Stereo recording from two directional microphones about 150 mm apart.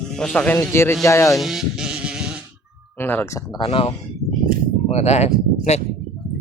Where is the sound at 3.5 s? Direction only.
35° left (ahead or behind).